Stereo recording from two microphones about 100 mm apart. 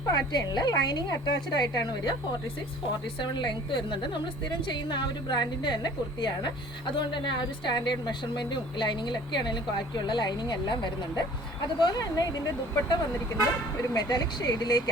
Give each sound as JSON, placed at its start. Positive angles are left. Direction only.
{"t": 0.3, "sound": "a woman's voice", "side_deg": 45}
{"t": 3.2, "sound": "a woman's voice", "side_deg": 50}